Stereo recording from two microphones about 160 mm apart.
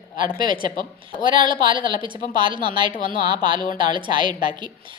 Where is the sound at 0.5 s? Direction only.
30° right (ahead or behind).